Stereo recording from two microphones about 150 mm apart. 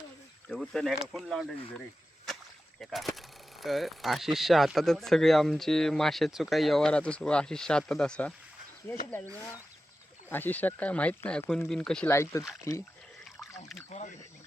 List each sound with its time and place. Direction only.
0.5 s speech: 5° left (ahead or behind)
2.8 s speech: centre (ahead or behind)
3.2 s a sound: centre (ahead or behind)
4.4 s speech: centre (ahead or behind)
10.2 s speech: 15° left (ahead or behind)
12.1 s speech: 20° left (ahead or behind)